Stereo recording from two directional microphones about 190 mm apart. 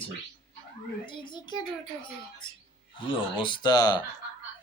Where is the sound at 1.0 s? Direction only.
25° left (ahead or behind).